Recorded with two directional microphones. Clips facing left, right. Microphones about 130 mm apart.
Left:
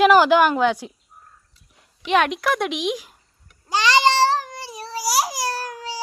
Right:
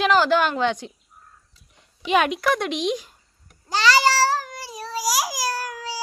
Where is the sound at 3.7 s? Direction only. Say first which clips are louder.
Left 1 dB; 20° left (ahead or behind).